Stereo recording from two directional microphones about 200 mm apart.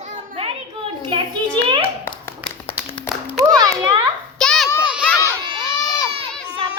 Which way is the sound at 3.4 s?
20° right (ahead or behind).